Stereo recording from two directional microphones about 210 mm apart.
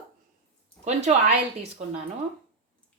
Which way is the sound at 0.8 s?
35° right (ahead or behind).